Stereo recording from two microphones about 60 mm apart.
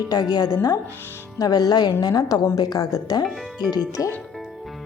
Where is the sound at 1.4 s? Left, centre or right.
Left.